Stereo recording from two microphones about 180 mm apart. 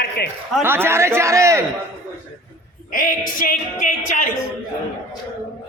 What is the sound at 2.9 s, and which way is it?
Speech, 50° left (ahead or behind).